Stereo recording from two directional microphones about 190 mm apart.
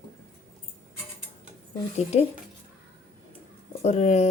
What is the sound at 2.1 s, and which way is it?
Speech, 35° left (ahead or behind).